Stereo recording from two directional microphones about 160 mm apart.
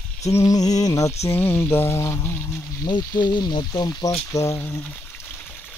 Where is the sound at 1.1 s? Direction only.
40° left (ahead or behind).